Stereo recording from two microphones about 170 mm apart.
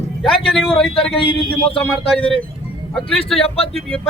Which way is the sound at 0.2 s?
Centre (ahead or behind).